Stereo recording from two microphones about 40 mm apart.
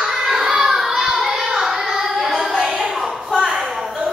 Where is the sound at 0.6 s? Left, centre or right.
Centre.